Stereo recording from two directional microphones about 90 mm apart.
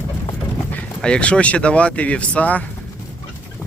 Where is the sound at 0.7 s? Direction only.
10° left (ahead or behind).